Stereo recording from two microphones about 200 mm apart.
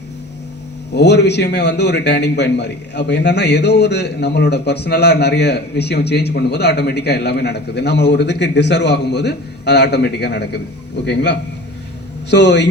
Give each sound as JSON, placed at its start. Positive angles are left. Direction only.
{"t": 0.9, "sound": "a man's voice", "side_deg": 55}